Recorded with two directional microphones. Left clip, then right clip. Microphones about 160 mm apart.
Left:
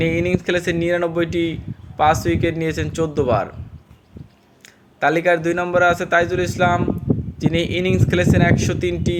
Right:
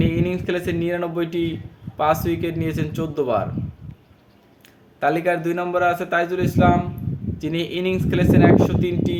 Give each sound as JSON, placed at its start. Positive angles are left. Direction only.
{"t": 0.0, "sound": "a man's voice", "side_deg": 20}
{"t": 4.9, "sound": "a man's voice", "side_deg": 20}